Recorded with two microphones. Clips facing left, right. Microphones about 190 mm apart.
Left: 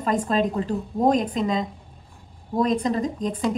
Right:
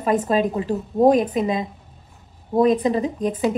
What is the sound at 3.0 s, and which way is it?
Speech, 5° right (ahead or behind).